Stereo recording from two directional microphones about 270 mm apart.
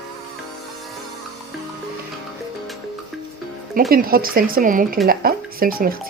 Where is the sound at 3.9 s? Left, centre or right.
Right.